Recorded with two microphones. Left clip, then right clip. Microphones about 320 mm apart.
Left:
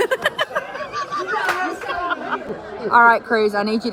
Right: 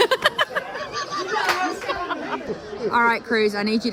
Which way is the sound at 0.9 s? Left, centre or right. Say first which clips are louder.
Left 4 dB; left.